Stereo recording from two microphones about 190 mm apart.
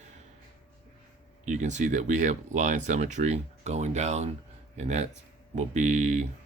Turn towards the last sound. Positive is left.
turn(degrees=-40)  # may be behind; listen again after turning